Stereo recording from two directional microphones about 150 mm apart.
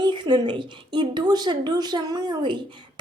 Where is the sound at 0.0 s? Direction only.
30° right (ahead or behind).